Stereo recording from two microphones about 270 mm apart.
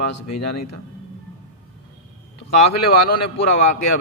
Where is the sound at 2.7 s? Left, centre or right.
Left.